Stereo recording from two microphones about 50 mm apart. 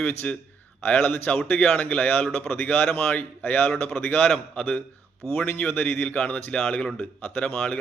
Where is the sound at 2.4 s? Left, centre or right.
Left.